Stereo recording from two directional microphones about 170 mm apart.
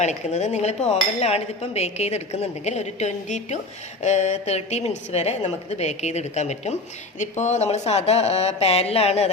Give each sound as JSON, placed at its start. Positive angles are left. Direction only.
{"t": 0.0, "sound": "dishes", "side_deg": 45}